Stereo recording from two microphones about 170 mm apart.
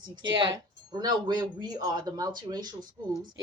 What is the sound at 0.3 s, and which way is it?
Speech, 25° right (ahead or behind).